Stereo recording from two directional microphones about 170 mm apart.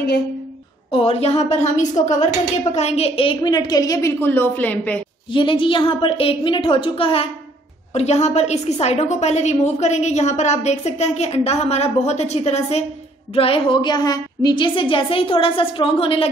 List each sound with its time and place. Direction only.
0.9 s a woman's voice: 35° left (ahead or behind); by 5.0 s 10° left (ahead or behind)
5.3 s a woman's voice: 30° left (ahead or behind)